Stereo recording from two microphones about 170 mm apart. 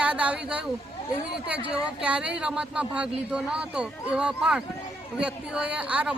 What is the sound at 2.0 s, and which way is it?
Speech, 5° right (ahead or behind).